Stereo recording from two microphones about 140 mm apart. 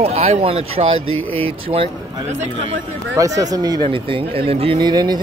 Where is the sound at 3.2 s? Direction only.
25° right (ahead or behind).